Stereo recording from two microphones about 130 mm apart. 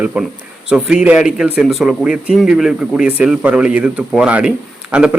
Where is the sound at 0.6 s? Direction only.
5° right (ahead or behind).